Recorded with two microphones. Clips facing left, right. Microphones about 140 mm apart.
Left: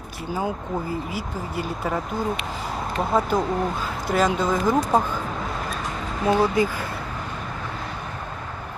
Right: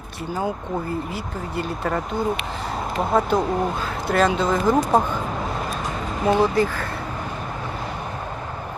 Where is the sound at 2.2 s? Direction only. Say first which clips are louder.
Right 2 dB; centre (ahead or behind).